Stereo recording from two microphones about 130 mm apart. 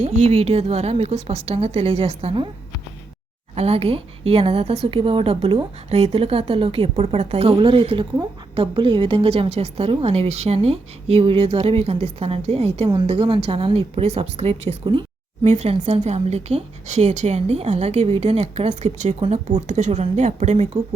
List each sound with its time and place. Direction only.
0.0 s a woman's voice: 55° right (ahead or behind)
3.5 s a woman's voice: 50° right (ahead or behind)
7.5 s a woman's voice: 40° right (ahead or behind); by 20.7 s 65° right (ahead or behind)